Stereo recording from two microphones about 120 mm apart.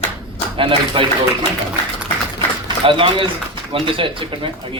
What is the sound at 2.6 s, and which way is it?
A man's voice, 45° right (ahead or behind).